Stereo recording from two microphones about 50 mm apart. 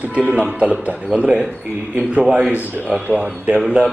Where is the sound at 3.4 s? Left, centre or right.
Right.